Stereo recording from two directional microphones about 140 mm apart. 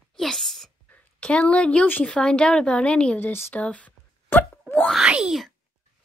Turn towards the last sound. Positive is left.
turn(degrees=0)  # may be behind; listen again after turning